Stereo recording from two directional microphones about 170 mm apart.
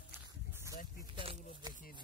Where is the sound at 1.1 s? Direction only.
35° right (ahead or behind).